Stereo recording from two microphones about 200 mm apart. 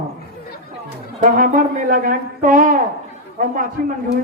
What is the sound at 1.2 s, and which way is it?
A man's voice, 45° right (ahead or behind).